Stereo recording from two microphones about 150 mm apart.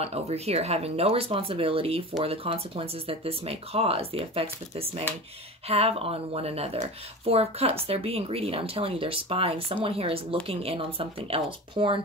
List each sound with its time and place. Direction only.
0.0 s speech: 45° right (ahead or behind)